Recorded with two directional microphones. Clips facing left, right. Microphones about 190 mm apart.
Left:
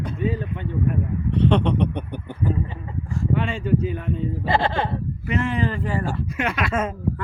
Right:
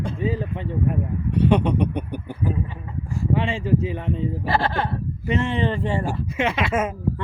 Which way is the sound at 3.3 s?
25° right (ahead or behind).